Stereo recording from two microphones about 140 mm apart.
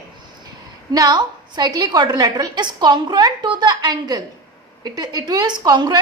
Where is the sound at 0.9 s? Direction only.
30° right (ahead or behind).